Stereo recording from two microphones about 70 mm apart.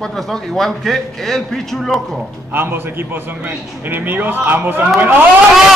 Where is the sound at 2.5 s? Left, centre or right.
Right.